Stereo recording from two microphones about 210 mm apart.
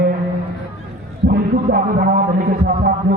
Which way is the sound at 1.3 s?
45° right (ahead or behind).